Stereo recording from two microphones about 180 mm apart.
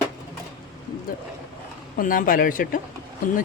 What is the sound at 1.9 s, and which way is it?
Speech, 50° left (ahead or behind).